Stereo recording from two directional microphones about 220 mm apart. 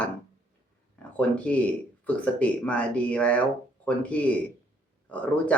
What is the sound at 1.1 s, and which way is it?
Speech, 5° left (ahead or behind).